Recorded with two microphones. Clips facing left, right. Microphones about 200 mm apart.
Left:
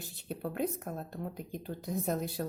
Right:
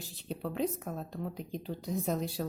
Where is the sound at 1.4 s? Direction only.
50° left (ahead or behind).